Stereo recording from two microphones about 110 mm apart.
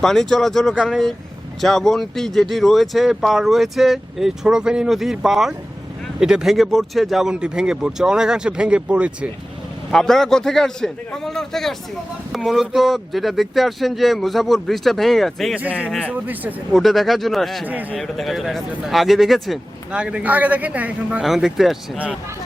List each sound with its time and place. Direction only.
0.0 s speech: 5° left (ahead or behind)
9.9 s speech: 5° left (ahead or behind)
16.0 s a man's voice: 15° right (ahead or behind)
16.7 s a man's voice: centre (ahead or behind)
21.2 s speech: centre (ahead or behind)